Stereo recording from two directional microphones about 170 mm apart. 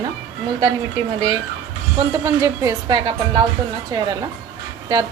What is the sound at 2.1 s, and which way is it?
Speech, 20° right (ahead or behind).